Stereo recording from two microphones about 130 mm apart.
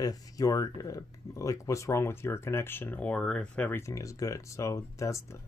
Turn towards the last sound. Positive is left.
turn(degrees=25)  # may be behind; listen again after turning